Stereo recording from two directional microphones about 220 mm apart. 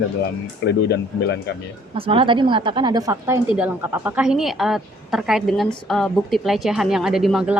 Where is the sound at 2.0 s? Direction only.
25° right (ahead or behind).